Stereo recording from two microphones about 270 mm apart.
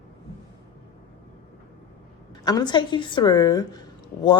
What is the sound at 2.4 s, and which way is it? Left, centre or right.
A woman's voice, centre.